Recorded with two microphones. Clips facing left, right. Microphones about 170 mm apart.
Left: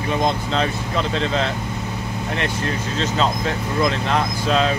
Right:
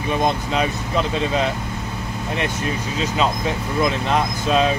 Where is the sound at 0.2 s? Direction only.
15° right (ahead or behind).